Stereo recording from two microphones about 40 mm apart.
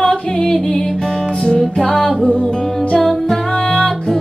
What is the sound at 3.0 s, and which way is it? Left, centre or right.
Music, centre.